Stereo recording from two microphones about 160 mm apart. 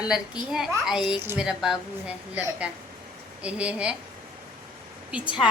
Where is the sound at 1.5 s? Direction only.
5° right (ahead or behind).